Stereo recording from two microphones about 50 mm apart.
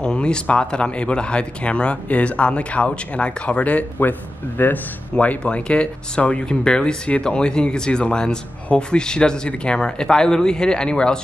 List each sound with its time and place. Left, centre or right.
0.0 s speech: centre; by 4.7 s left
5.1 s speech: left